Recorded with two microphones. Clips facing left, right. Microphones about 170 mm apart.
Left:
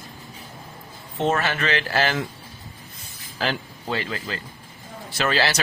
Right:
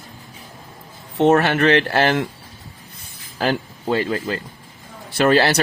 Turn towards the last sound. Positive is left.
turn(degrees=-50)  # may be behind; listen again after turning